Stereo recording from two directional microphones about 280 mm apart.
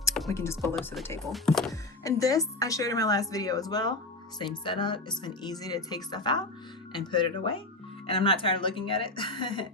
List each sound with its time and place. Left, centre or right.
0.3 s speech: centre
2.0 s speech: centre